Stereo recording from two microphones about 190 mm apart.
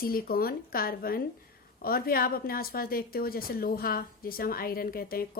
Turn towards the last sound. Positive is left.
turn(degrees=50)  # may be behind; listen again after turning